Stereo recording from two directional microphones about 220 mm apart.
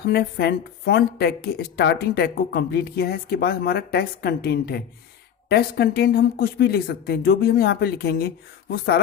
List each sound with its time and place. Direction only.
0.1 s speech: 45° left (ahead or behind)